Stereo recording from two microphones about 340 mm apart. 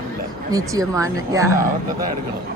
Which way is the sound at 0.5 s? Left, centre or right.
Centre.